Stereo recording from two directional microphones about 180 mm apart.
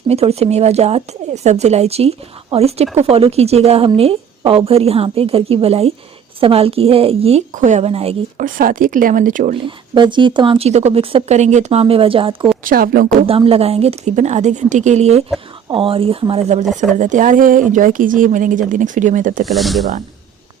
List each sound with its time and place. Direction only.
0.1 s speech: 35° right (ahead or behind)
8.4 s speech: 50° right (ahead or behind)
9.6 s speech: 25° right (ahead or behind)
12.6 s speech: 55° right (ahead or behind)
13.2 s speech: 30° right (ahead or behind)
19.5 s speech: centre (ahead or behind)